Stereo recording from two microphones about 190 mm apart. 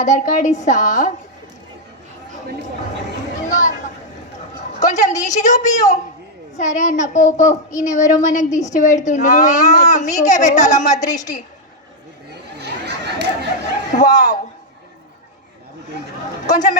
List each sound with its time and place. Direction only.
0.0 s a woman's voice: 40° left (ahead or behind)
3.5 s a sound: 40° left (ahead or behind)
4.8 s a woman's voice: 40° left (ahead or behind)
11.0 s a woman's voice: 20° left (ahead or behind)
12.5 s a sound: 60° right (ahead or behind)
13.9 s speech: 40° left (ahead or behind)
16.5 s a woman's voice: 40° left (ahead or behind)